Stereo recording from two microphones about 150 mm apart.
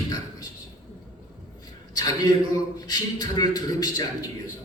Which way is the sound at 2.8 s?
25° left (ahead or behind).